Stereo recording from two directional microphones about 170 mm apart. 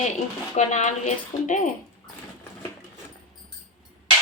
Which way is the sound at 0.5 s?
45° left (ahead or behind).